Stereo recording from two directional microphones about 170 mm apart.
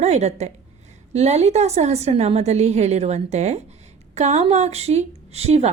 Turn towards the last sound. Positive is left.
turn(degrees=-40)  # may be behind; listen again after turning